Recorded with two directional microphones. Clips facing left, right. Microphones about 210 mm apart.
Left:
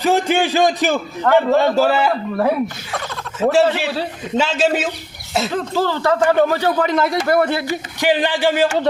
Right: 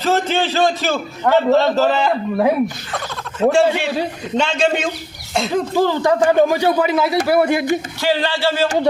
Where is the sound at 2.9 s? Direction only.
Centre (ahead or behind).